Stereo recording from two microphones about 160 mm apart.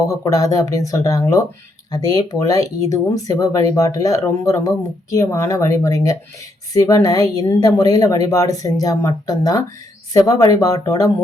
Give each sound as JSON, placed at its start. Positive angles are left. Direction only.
{"t": 0.0, "sound": "a woman's voice", "side_deg": 20}